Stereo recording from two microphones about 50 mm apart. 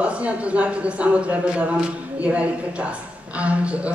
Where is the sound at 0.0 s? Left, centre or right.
Right.